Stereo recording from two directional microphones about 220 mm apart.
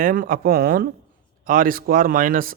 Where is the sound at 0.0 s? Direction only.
40° right (ahead or behind).